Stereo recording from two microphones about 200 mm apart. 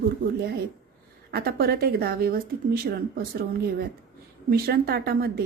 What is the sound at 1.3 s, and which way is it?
A woman's voice, 50° right (ahead or behind).